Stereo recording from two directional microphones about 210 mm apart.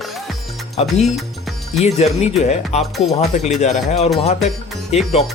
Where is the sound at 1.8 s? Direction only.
30° left (ahead or behind).